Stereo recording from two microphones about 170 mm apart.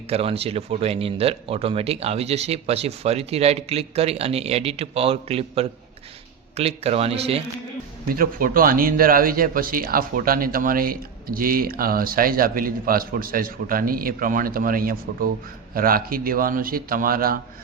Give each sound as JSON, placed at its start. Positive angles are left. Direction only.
{"t": 0.1, "sound": "speech", "side_deg": -35}
{"t": 8.1, "sound": "speech", "side_deg": -55}